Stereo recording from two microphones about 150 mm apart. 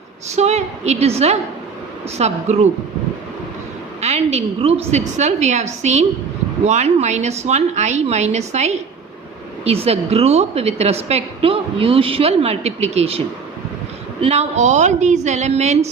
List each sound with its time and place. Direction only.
0.3 s a woman's voice: 45° right (ahead or behind)
4.0 s a woman's voice: 45° right (ahead or behind)